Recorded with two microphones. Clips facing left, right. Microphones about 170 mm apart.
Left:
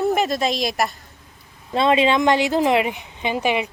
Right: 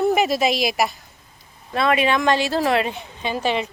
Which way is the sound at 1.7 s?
25° left (ahead or behind).